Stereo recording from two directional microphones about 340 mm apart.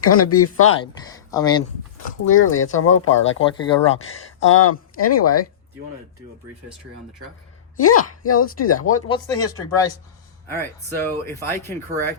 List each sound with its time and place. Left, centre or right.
0.0 s speech: left
1.1 s speech: centre
2.2 s speech: left
3.4 s speech: centre
4.4 s speech: left
7.8 s speech: left
9.2 s speech: centre